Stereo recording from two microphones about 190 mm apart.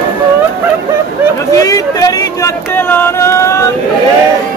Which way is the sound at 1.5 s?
20° left (ahead or behind).